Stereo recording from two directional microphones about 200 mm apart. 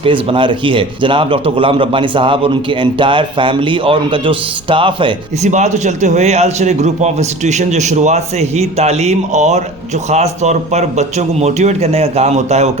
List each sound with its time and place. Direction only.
0.0 s a man's voice: 25° right (ahead or behind)
5.5 s a man's voice: 35° right (ahead or behind)